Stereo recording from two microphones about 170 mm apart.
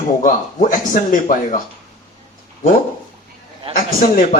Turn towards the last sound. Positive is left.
turn(degrees=50)  # may be behind; listen again after turning